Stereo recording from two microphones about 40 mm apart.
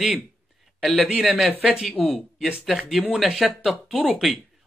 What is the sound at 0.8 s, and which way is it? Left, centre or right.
Speech, centre.